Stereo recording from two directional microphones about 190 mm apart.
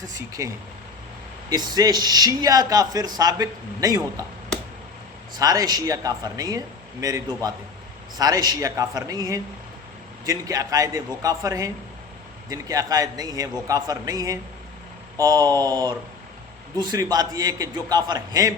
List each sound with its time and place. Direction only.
0.0 s a man's voice: 15° right (ahead or behind)
5.4 s a man's voice: 20° right (ahead or behind)